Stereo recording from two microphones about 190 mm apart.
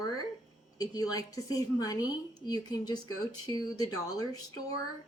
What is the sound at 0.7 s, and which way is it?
A woman's voice, 20° left (ahead or behind).